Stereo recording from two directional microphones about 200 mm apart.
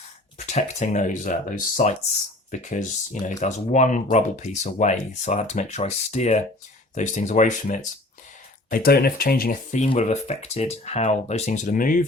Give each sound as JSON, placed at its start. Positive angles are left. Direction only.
{"t": 0.3, "sound": "speech", "side_deg": 35}
{"t": 8.7, "sound": "speech", "side_deg": 50}